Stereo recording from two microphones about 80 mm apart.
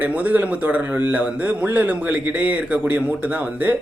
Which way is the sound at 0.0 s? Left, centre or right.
Centre.